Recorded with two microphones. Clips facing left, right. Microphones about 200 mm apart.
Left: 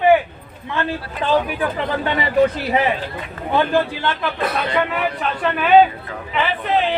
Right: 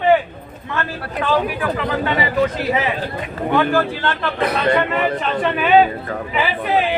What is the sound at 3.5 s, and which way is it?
Speech, 15° left (ahead or behind).